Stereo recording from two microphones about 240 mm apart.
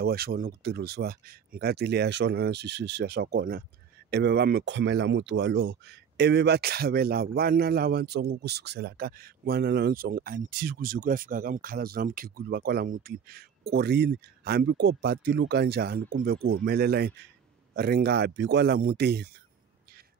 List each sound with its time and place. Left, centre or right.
0.0 s speech: right